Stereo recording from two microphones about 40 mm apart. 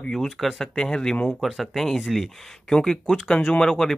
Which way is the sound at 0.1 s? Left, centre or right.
Centre.